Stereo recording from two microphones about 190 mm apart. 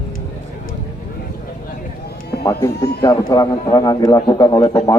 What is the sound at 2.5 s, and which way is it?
A man's voice, 15° left (ahead or behind).